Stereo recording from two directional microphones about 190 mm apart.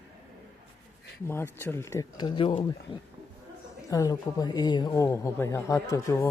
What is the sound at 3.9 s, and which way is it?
Speech, 20° left (ahead or behind).